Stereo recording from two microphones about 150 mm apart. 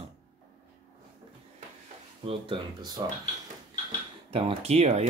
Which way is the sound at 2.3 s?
30° right (ahead or behind).